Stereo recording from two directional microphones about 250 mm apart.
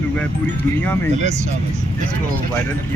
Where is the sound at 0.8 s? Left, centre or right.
Centre.